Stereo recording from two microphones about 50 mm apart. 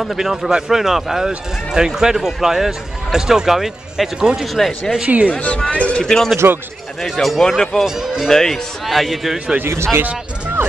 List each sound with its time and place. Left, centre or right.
0.0 s a man's voice: centre
4.6 s a man's voice: centre
5.0 s speech: right
5.3 s speech: left
5.9 s speech: centre
6.3 s speech: right
7.0 s speech: centre
7.8 s a man's voice: centre
8.3 s a man's voice: centre